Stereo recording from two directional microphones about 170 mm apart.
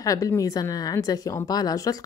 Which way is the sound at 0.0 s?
20° left (ahead or behind).